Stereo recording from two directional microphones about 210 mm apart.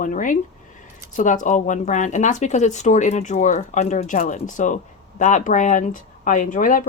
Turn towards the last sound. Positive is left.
turn(degrees=40)  # may be behind; listen again after turning